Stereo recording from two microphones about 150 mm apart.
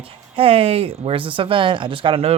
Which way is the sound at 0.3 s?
40° right (ahead or behind).